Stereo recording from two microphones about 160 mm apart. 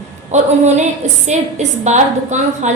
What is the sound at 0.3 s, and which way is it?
A woman's voice, 45° right (ahead or behind).